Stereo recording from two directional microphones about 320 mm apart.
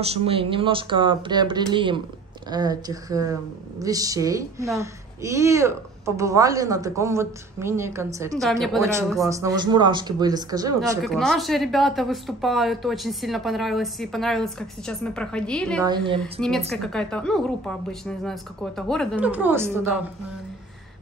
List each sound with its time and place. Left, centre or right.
0.0 s a woman's voice: centre
11.1 s a woman's voice: centre
15.8 s a woman's voice: centre
16.3 s a woman's voice: centre